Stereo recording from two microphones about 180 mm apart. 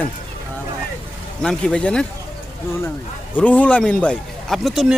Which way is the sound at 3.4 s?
10° left (ahead or behind).